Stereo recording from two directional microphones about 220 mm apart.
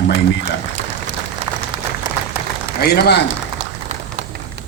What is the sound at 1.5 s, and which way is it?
Applause, 15° right (ahead or behind).